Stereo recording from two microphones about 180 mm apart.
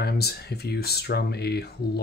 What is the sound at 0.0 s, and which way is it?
Speech, 60° left (ahead or behind).